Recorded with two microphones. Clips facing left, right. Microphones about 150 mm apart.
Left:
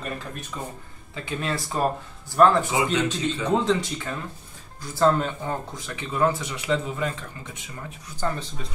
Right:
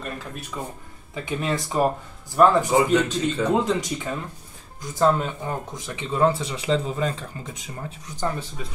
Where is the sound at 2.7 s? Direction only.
40° right (ahead or behind).